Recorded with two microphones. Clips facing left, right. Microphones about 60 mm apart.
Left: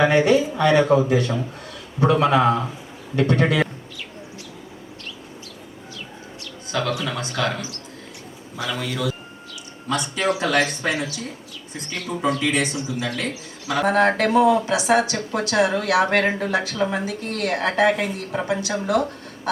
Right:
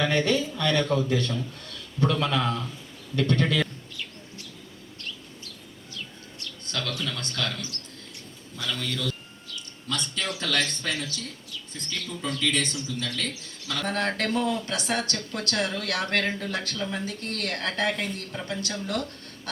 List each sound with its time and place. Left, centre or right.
0.0 s speech: centre
6.4 s a sound: centre
7.2 s speech: centre
8.5 s speech: centre